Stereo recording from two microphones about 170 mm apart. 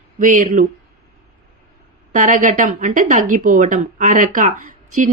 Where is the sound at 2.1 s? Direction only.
50° right (ahead or behind).